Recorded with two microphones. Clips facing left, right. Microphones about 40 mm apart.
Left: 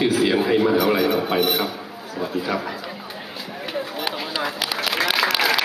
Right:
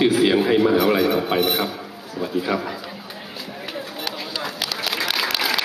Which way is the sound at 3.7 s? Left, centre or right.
Centre.